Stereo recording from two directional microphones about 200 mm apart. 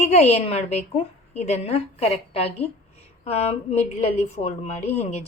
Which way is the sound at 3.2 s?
30° left (ahead or behind).